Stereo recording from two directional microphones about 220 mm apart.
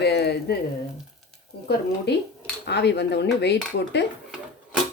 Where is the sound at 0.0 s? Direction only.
50° left (ahead or behind).